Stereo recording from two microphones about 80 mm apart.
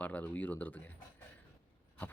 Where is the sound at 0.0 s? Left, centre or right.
Centre.